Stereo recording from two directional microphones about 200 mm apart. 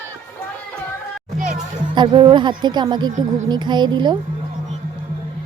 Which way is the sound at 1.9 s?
20° right (ahead or behind).